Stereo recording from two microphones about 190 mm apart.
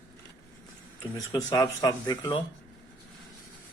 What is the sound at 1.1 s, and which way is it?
Speech, 20° left (ahead or behind).